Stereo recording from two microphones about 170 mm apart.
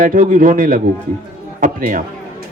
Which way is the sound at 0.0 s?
50° right (ahead or behind).